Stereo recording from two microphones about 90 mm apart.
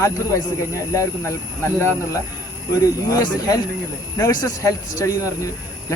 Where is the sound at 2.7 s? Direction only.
40° left (ahead or behind).